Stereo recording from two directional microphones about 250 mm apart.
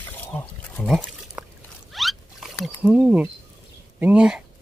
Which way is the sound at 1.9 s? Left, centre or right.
Centre.